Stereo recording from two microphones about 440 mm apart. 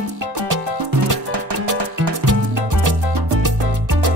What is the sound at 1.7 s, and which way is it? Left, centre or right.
Music, right.